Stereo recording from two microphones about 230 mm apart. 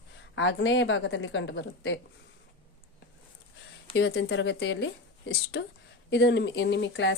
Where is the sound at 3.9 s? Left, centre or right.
Left.